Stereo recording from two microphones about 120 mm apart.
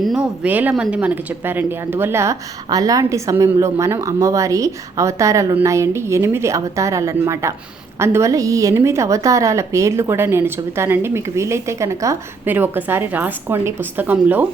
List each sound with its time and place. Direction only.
0.0 s a sound: centre (ahead or behind)
0.4 s speech: 15° right (ahead or behind)
12.5 s speech: 15° right (ahead or behind)